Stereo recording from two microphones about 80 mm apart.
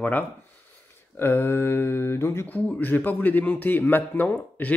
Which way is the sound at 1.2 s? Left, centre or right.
Left.